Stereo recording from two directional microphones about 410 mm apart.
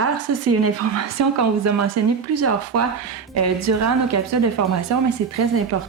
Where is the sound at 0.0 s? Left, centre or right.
Right.